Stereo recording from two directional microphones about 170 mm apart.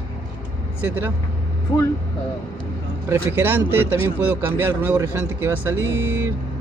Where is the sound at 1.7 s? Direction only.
30° left (ahead or behind).